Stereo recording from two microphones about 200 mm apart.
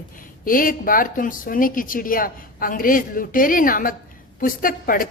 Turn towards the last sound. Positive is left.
turn(degrees=45)  # may be behind; listen again after turning